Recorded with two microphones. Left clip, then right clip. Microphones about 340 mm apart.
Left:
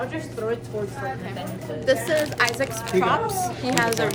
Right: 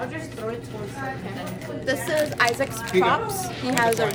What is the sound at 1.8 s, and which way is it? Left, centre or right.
A woman's voice, centre.